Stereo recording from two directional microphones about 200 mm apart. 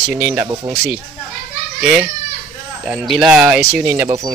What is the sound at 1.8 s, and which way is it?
Speech, 5° right (ahead or behind).